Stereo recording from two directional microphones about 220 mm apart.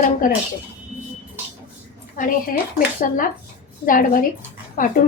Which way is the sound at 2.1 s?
40° left (ahead or behind).